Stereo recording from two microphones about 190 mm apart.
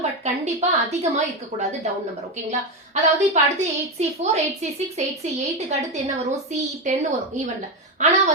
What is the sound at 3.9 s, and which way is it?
Speech, 35° right (ahead or behind).